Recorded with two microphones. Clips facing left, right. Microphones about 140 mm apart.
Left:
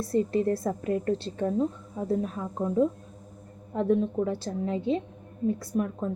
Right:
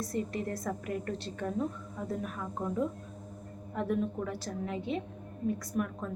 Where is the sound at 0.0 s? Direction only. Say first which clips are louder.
Left 9 dB; 30° left (ahead or behind).